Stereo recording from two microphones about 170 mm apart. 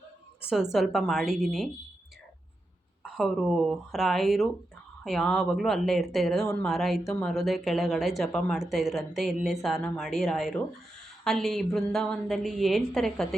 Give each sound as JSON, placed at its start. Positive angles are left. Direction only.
{"t": 0.5, "sound": "speech", "side_deg": 0}
{"t": 3.0, "sound": "speech", "side_deg": 0}